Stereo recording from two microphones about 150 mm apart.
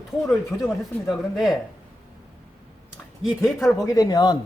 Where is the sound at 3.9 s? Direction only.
25° left (ahead or behind).